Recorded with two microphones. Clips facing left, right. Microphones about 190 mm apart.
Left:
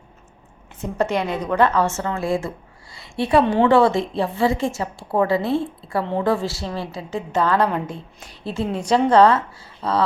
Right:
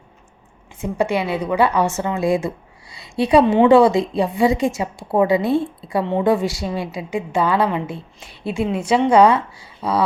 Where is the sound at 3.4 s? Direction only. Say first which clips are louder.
Right 3 dB; 5° right (ahead or behind).